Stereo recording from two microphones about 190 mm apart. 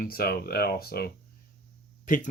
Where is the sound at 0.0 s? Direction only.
50° left (ahead or behind).